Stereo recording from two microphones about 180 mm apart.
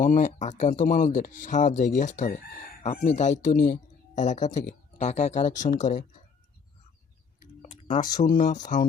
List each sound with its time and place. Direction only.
0.0 s speech: 45° left (ahead or behind)
7.6 s a sound: 40° left (ahead or behind)
8.2 s speech: 50° left (ahead or behind)